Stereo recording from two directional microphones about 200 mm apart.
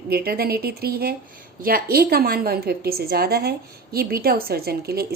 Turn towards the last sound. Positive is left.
turn(degrees=-50)  # may be behind; listen again after turning